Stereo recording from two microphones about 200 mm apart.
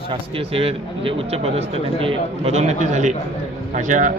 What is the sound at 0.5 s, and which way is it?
A man's voice, 30° right (ahead or behind).